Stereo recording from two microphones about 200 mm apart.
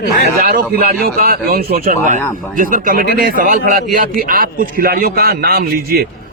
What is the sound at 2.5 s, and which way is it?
A man's voice, 40° right (ahead or behind).